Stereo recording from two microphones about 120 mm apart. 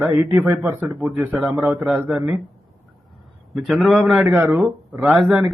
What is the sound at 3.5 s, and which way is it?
Speech, centre (ahead or behind).